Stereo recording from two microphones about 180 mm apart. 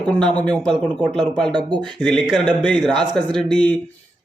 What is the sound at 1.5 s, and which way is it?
Speech, 25° right (ahead or behind).